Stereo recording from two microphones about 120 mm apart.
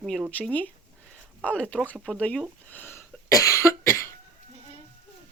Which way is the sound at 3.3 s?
30° left (ahead or behind).